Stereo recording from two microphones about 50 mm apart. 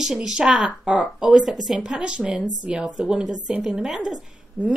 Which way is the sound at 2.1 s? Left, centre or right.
Right.